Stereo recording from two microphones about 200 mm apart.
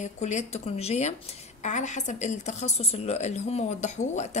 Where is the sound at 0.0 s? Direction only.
35° left (ahead or behind).